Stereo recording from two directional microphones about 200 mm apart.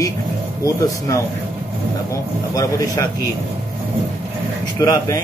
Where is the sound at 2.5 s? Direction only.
15° left (ahead or behind).